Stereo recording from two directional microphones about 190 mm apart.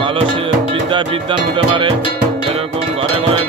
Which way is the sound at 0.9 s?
25° right (ahead or behind).